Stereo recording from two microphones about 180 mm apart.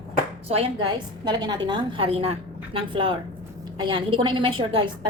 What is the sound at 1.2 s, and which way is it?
A woman's voice, 25° right (ahead or behind).